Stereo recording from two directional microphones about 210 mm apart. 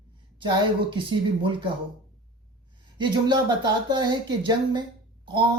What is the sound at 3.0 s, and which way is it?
Speech, 20° right (ahead or behind).